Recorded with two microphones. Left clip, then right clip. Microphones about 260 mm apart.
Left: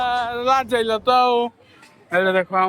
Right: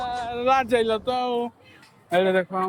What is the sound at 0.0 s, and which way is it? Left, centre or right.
Speech, centre.